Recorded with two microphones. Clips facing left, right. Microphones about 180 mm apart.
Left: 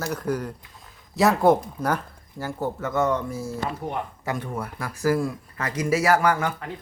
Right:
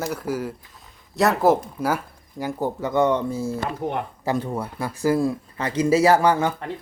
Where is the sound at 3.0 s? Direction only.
30° right (ahead or behind).